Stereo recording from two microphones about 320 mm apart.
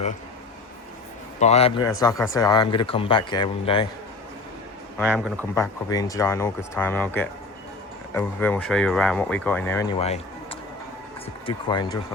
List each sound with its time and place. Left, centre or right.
1.4 s a man's voice: centre
4.9 s speech: centre
10.0 s a sound: centre
11.4 s speech: centre